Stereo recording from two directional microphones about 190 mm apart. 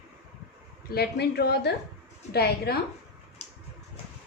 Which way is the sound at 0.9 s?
55° left (ahead or behind).